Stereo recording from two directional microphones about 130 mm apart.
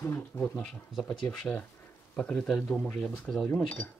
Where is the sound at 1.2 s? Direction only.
5° left (ahead or behind).